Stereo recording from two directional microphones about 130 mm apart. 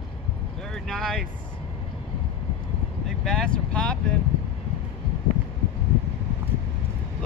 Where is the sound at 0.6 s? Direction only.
5° left (ahead or behind).